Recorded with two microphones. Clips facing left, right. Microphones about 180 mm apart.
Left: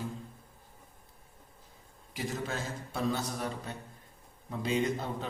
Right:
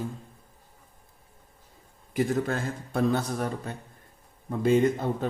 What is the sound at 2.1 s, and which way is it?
A man's voice, 50° right (ahead or behind).